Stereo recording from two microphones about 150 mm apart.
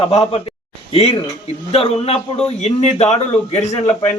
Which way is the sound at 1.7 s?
40° left (ahead or behind).